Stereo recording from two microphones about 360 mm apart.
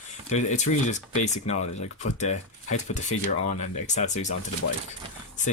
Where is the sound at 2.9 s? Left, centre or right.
Centre.